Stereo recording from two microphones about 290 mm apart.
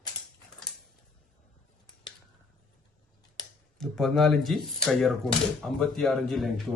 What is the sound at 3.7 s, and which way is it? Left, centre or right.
A man's voice, centre.